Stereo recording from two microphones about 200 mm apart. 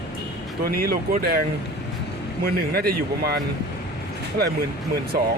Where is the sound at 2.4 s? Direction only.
50° right (ahead or behind).